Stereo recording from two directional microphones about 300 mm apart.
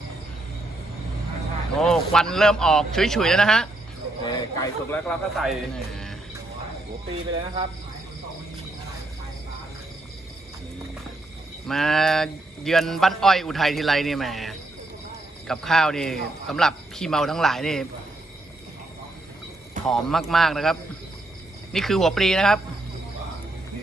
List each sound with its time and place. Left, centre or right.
1.7 s a man's voice: centre
7.3 s speech: centre
11.6 s a man's voice: centre
19.8 s a man's voice: centre